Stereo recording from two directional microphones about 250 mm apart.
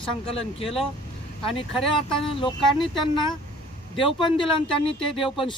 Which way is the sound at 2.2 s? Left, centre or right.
Centre.